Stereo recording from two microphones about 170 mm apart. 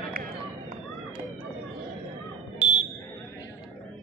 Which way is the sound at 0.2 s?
60° right (ahead or behind).